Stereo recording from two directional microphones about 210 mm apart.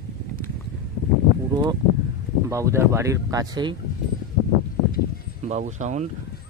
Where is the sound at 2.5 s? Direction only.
15° right (ahead or behind).